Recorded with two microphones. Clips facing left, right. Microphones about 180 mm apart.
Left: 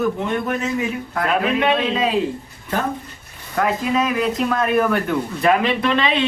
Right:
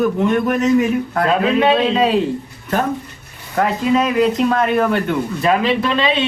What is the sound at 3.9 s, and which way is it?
A man's voice, 35° right (ahead or behind).